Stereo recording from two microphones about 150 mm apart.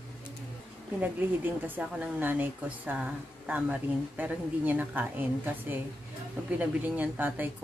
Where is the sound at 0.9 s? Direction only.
10° right (ahead or behind).